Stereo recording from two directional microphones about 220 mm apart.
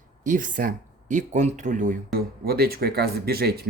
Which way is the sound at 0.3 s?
35° right (ahead or behind).